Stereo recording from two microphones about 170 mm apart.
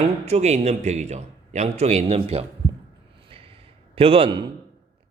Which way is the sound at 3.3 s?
35° right (ahead or behind).